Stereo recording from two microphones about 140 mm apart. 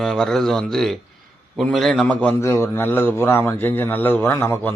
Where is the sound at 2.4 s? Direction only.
20° left (ahead or behind).